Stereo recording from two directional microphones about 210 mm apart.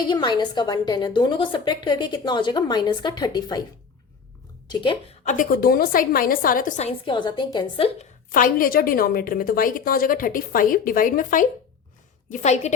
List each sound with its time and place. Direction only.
0.1 s a woman's voice: 20° left (ahead or behind)
4.7 s a woman's voice: 25° left (ahead or behind)
7.9 s a woman's voice: 40° left (ahead or behind)